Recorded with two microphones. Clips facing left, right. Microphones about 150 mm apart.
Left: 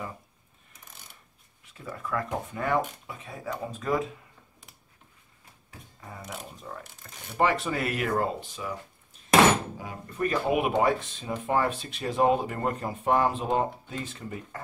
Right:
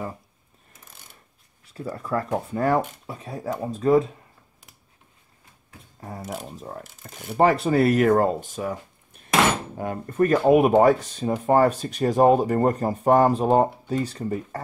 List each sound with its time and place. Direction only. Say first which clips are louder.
1.7 s speech: right 6 dB; 35° right (ahead or behind)
5.9 s speech: right 7 dB; 35° right (ahead or behind)